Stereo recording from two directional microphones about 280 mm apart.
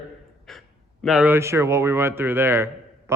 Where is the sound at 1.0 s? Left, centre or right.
Centre.